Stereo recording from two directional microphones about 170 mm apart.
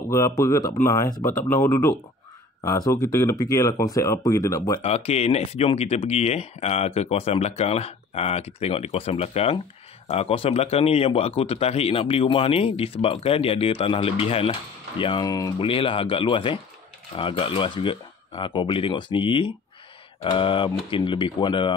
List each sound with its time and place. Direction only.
0.4 s speech: 20° left (ahead or behind)
4.8 s speech: 40° left (ahead or behind)